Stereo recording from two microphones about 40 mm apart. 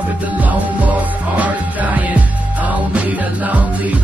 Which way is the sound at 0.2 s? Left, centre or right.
Right.